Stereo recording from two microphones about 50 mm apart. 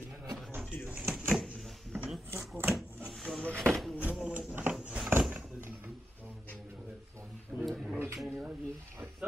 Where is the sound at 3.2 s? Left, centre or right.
Centre.